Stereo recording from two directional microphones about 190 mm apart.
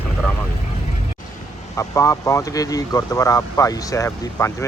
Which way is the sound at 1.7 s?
15° left (ahead or behind).